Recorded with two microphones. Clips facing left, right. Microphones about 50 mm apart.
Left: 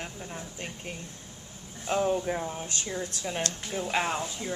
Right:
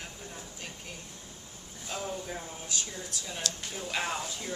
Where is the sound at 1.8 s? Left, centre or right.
Left.